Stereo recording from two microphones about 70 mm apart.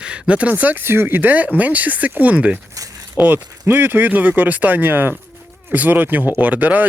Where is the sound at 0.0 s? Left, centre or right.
Centre.